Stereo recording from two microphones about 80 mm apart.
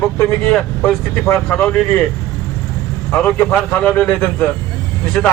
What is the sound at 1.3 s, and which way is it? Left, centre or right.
Speech, left.